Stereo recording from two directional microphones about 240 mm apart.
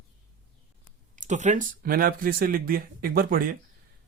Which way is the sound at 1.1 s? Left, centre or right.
Right.